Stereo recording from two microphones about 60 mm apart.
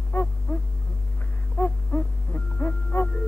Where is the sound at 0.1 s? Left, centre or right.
Left.